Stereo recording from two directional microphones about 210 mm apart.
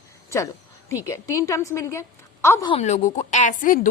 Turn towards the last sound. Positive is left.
turn(degrees=40)  # may be behind; listen again after turning